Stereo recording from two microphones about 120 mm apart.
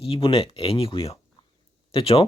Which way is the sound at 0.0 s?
50° left (ahead or behind).